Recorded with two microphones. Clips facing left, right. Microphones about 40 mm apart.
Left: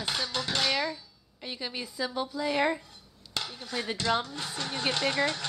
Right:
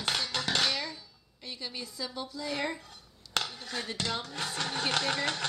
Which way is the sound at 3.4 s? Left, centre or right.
Centre.